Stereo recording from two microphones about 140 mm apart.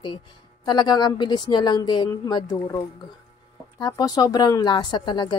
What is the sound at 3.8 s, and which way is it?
Speech, 30° left (ahead or behind).